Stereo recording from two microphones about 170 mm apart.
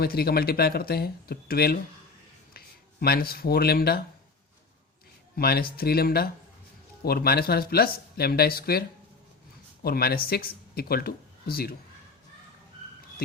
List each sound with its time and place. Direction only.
0.0 s speech: 65° left (ahead or behind)
5.4 s speech: 65° left (ahead or behind)
9.8 s speech: 65° left (ahead or behind)